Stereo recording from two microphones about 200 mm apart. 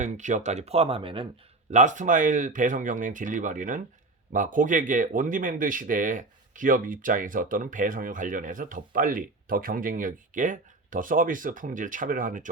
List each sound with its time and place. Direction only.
0.0 s speech: 35° right (ahead or behind)
1.7 s speech: 40° right (ahead or behind)